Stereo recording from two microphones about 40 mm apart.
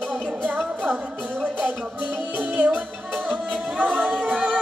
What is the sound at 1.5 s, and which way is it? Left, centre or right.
Music, right.